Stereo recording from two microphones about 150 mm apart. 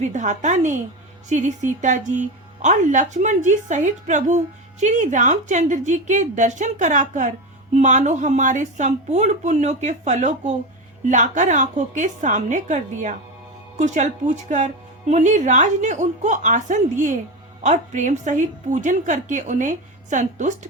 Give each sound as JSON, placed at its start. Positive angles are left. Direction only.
{"t": 0.0, "sound": "a woman's voice", "side_deg": -55}